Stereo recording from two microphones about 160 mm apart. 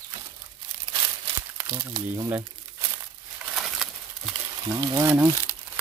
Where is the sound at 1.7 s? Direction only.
25° right (ahead or behind).